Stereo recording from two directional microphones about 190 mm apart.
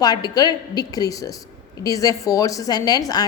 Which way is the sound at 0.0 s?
20° left (ahead or behind).